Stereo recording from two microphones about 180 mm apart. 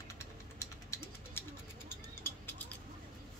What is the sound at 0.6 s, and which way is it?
Ratchet, 15° left (ahead or behind).